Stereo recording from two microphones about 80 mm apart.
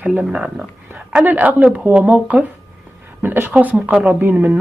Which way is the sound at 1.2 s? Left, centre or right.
Right.